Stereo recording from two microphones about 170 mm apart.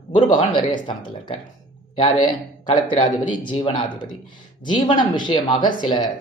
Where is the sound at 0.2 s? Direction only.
30° left (ahead or behind).